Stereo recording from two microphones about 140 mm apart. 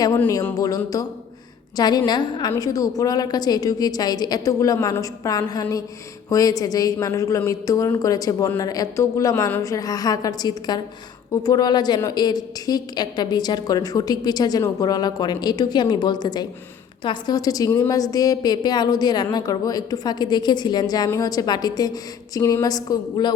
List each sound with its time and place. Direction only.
0.6 s a woman's voice: 25° left (ahead or behind)